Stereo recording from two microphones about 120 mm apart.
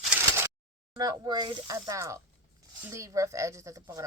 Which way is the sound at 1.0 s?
35° right (ahead or behind).